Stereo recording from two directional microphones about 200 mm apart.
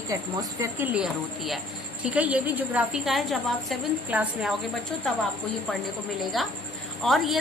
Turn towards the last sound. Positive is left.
turn(degrees=0)  # may be behind; listen again after turning